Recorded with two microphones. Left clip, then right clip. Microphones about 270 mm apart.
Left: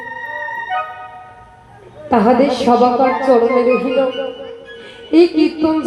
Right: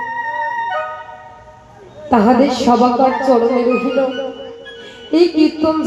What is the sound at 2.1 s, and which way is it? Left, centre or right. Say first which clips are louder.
Speech: even; left.